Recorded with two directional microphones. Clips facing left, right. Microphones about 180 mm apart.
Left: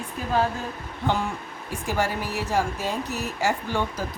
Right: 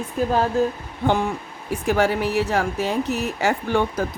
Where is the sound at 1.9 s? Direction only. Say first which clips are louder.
Right 7 dB; 65° right (ahead or behind).